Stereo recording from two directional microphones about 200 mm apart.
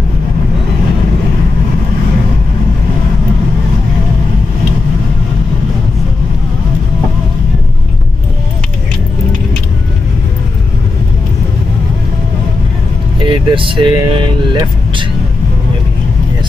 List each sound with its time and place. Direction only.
13.3 s speech: 25° right (ahead or behind)